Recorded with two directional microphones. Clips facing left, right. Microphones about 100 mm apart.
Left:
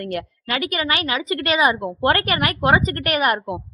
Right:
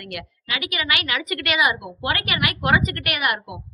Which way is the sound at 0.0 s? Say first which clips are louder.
Left 8 dB; 35° left (ahead or behind).